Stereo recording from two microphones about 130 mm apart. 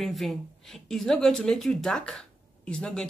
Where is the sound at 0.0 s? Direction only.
Centre (ahead or behind).